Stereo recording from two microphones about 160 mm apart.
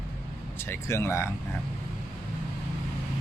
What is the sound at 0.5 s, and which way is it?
Speech, 15° left (ahead or behind).